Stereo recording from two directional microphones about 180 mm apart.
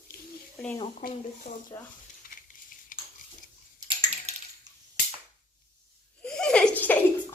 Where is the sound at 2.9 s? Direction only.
50° left (ahead or behind).